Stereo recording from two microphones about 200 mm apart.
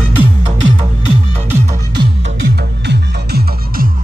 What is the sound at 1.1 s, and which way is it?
Music, 35° right (ahead or behind).